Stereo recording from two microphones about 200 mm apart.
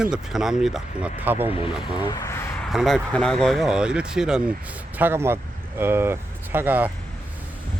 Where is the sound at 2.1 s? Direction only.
15° left (ahead or behind).